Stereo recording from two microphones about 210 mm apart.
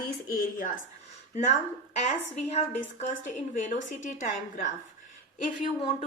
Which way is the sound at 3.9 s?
35° left (ahead or behind).